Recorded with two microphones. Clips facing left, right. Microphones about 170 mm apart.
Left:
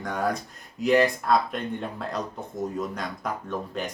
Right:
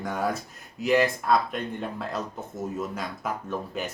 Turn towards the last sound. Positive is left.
turn(degrees=-5)  # may be behind; listen again after turning